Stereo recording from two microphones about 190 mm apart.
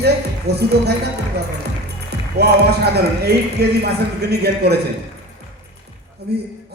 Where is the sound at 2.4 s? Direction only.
60° right (ahead or behind).